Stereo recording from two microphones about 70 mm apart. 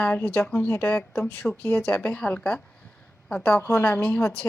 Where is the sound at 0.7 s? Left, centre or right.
Left.